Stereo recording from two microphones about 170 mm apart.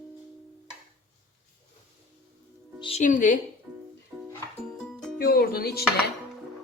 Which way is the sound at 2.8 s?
30° left (ahead or behind).